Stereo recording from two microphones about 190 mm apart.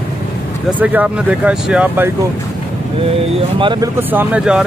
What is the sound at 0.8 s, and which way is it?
Speech, 5° right (ahead or behind).